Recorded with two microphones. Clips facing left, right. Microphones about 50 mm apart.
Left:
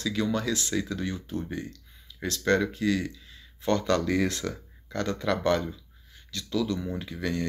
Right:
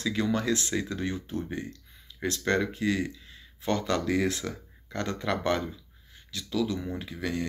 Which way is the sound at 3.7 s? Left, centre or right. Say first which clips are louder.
Left 2 dB; centre.